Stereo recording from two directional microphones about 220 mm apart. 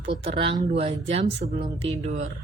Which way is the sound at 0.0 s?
25° right (ahead or behind).